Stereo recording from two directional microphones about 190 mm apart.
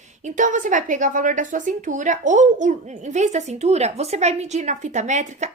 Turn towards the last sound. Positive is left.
turn(degrees=-40)  # may be behind; listen again after turning